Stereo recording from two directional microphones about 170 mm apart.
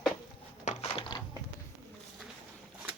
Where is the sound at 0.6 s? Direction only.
40° left (ahead or behind).